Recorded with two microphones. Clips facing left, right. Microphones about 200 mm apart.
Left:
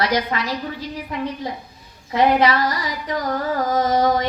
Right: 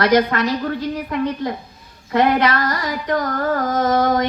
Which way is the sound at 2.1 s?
55° right (ahead or behind).